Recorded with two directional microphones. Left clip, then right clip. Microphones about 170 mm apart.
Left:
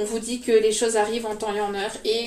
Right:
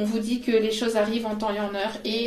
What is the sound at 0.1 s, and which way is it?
A woman's voice, 35° right (ahead or behind).